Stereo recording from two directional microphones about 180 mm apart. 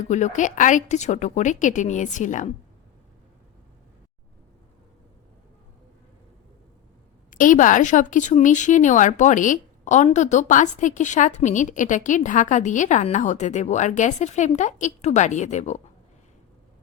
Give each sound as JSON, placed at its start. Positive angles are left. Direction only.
{"t": 0.1, "sound": "speech", "side_deg": 45}
{"t": 7.3, "sound": "speech", "side_deg": 45}